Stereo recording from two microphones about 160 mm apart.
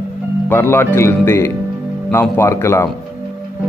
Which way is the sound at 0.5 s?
10° left (ahead or behind).